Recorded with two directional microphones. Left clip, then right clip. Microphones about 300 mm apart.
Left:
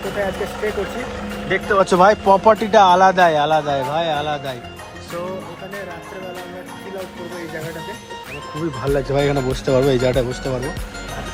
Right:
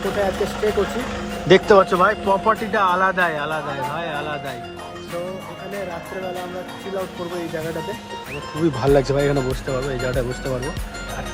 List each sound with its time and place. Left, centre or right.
0.2 s speech: centre
1.5 s speech: centre
1.8 s speech: centre
8.5 s speech: centre